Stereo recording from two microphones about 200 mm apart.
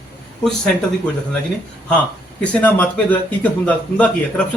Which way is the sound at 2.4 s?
5° left (ahead or behind).